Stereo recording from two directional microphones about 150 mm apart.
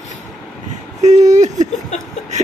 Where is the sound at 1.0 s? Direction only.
50° right (ahead or behind).